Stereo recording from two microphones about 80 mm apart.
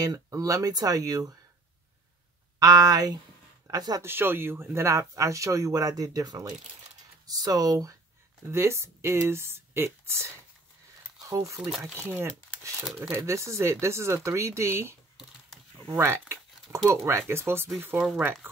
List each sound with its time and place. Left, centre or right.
0.0 s speech: right
2.6 s speech: right
4.0 s speech: right
8.5 s speech: right
12.0 s speech: centre
13.2 s speech: right
17.9 s speech: centre
18.2 s speech: right